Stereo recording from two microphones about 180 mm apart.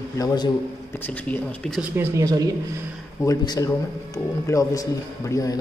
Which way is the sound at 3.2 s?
20° left (ahead or behind).